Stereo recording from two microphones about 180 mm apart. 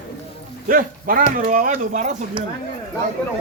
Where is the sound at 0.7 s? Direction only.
50° right (ahead or behind).